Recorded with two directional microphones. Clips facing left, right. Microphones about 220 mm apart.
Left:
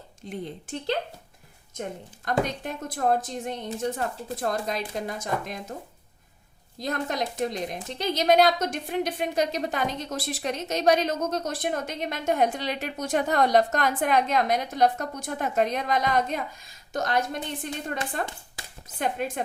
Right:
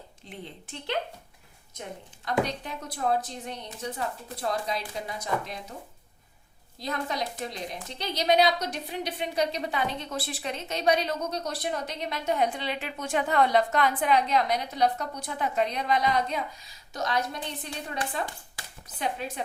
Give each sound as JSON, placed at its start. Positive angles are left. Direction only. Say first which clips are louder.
{"t": 0.3, "sound": "a woman's voice", "louder": "left 8 dB", "side_deg": 45}
{"t": 2.2, "sound": "a woman's voice", "louder": "left 2 dB", "side_deg": 50}
{"t": 6.7, "sound": "a woman's voice", "louder": "left 3 dB", "side_deg": 45}
{"t": 18.9, "sound": "a woman's voice", "louder": "left 4 dB", "side_deg": 50}